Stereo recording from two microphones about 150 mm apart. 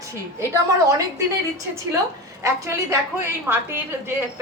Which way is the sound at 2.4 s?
20° right (ahead or behind).